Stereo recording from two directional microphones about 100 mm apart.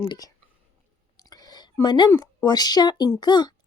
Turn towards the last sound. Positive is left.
turn(degrees=45)  # may be behind; listen again after turning